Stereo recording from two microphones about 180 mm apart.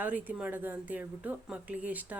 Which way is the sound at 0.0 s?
10° right (ahead or behind).